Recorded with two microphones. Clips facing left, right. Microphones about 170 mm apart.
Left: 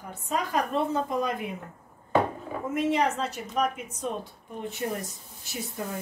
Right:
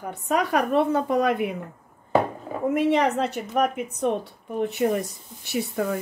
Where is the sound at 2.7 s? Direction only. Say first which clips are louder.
Right 5 dB; 65° right (ahead or behind).